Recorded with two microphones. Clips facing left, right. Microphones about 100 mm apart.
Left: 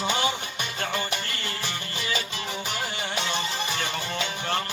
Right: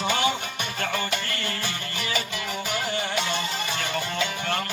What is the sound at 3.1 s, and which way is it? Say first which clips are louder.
Music: right 1 dB; 20° left (ahead or behind).